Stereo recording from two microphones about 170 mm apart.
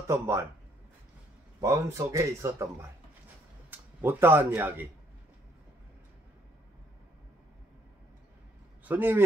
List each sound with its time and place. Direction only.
0.1 s speech: 15° right (ahead or behind)
1.6 s speech: 20° right (ahead or behind)
8.8 s a man's voice: 10° right (ahead or behind)